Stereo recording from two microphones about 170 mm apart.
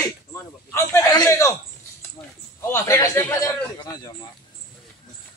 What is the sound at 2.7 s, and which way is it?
A man's voice, 20° left (ahead or behind).